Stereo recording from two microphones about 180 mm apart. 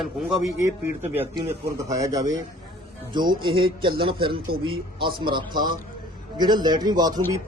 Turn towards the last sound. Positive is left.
turn(degrees=-20)  # may be behind; listen again after turning